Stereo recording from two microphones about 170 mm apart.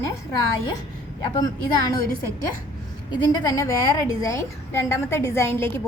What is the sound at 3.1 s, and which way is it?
A woman's voice, 25° left (ahead or behind).